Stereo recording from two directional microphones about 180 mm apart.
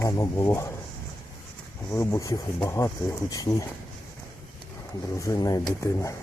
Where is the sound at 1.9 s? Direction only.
15° left (ahead or behind).